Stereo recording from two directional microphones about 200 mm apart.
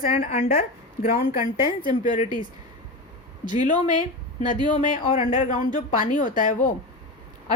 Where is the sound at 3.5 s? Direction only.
40° left (ahead or behind).